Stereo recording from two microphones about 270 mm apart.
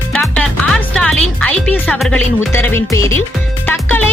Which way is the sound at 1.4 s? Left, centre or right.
Centre.